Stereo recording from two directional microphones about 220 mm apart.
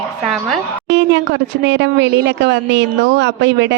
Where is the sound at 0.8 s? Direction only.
55° right (ahead or behind).